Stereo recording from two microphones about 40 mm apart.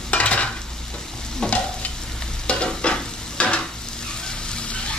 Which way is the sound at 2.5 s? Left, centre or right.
Left.